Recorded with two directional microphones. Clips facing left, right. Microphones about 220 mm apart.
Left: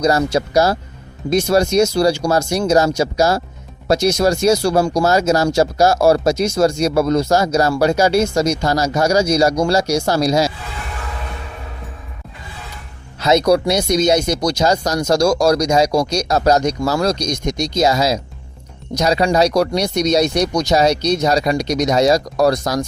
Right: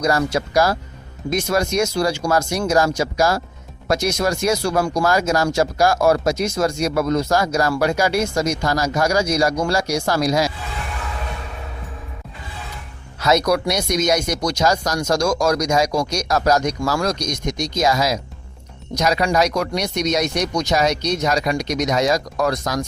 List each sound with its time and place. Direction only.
0.0 s speech: 25° left (ahead or behind)
13.1 s speech: 25° left (ahead or behind)